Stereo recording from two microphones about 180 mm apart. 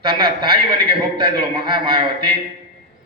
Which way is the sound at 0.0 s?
25° right (ahead or behind).